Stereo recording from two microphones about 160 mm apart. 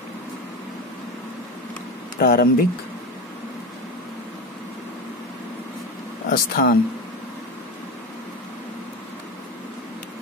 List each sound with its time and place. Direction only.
2.1 s speech: 70° left (ahead or behind)
6.3 s speech: 65° left (ahead or behind)